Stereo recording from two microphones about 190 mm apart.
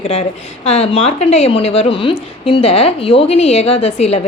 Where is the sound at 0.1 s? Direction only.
30° left (ahead or behind).